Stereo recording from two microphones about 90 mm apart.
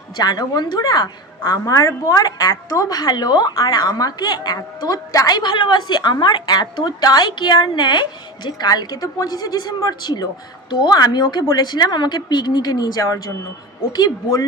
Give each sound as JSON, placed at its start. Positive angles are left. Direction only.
{"t": 0.2, "sound": "a woman's voice", "side_deg": 50}